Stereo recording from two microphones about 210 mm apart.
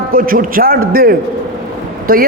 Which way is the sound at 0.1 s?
40° right (ahead or behind).